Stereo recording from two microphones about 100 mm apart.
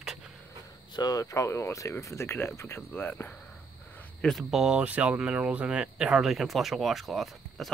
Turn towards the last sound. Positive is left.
turn(degrees=0)  # may be behind; listen again after turning